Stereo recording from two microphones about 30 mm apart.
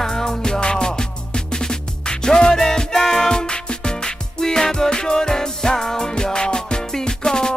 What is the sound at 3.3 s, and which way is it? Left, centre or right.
Music, left.